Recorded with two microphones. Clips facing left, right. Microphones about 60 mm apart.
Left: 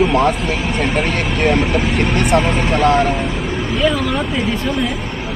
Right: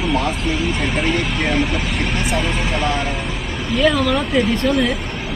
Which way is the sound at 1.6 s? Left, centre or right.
Centre.